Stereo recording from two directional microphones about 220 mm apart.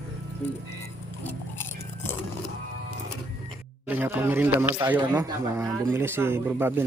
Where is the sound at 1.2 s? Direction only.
10° left (ahead or behind).